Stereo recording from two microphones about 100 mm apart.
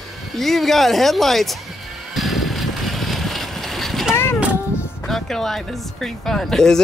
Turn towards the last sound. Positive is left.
turn(degrees=5)  # may be behind; listen again after turning